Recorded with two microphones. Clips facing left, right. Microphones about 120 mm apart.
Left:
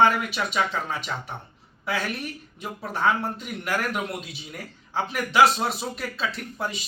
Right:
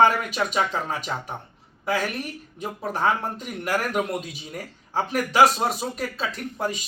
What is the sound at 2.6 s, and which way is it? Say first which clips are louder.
Speech: right 1 dB; 45° right (ahead or behind).